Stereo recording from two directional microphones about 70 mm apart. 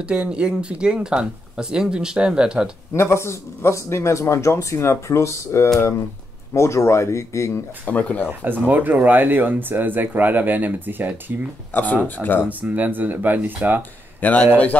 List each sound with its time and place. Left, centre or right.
0.0 s speech: centre
2.9 s a man's voice: left
7.8 s speech: centre
8.3 s speech: right
11.7 s speech: left
12.4 s speech: right
14.2 s speech: left